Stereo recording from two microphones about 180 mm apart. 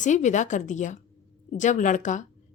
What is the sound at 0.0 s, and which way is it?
Speech, 40° left (ahead or behind).